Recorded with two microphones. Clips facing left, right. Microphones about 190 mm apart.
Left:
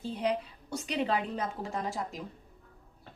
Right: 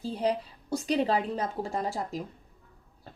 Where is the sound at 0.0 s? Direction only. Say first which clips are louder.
Right 2 dB; 35° right (ahead or behind).